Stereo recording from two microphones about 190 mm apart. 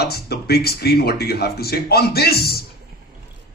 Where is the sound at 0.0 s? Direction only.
55° left (ahead or behind).